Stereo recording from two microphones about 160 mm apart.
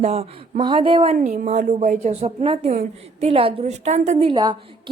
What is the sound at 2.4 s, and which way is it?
A woman's voice, 35° right (ahead or behind).